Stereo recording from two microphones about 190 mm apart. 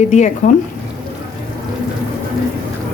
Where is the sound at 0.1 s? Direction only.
40° left (ahead or behind).